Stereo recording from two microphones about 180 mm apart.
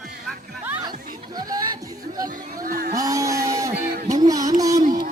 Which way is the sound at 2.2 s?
50° right (ahead or behind).